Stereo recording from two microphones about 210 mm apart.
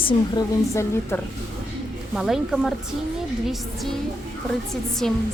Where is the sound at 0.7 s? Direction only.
15° left (ahead or behind).